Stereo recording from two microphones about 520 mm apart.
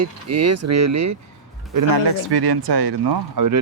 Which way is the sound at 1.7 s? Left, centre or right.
Right.